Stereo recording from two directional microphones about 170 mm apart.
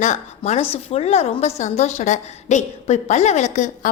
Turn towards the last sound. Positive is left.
turn(degrees=45)  # may be behind; listen again after turning